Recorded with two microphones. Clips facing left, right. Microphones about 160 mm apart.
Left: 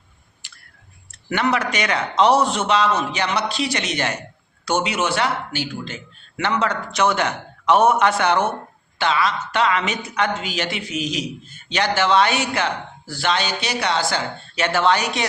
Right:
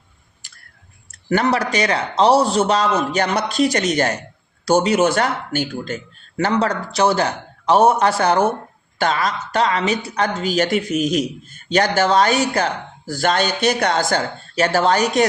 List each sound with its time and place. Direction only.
0.4 s clicking: 45° right (ahead or behind)
1.1 s a man's voice: 40° right (ahead or behind)